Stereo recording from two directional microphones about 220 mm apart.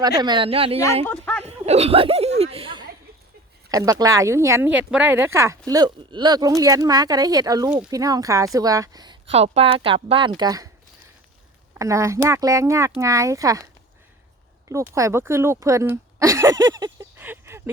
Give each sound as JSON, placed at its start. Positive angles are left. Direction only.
{"t": 0.2, "sound": "speech", "side_deg": -20}
{"t": 1.0, "sound": "a sound", "side_deg": 10}
{"t": 1.5, "sound": "a sound", "side_deg": -30}
{"t": 3.7, "sound": "speech", "side_deg": -15}
{"t": 11.7, "sound": "speech", "side_deg": -15}
{"t": 14.7, "sound": "speech", "side_deg": -15}